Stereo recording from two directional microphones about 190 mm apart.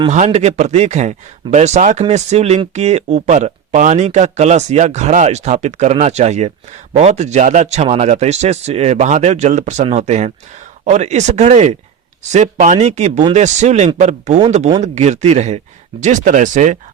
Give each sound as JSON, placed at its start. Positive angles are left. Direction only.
{"t": 0.1, "sound": "speech", "side_deg": -35}